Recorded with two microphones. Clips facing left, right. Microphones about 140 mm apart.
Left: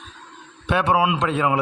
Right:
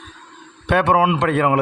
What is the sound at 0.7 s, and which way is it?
Speech, 55° right (ahead or behind).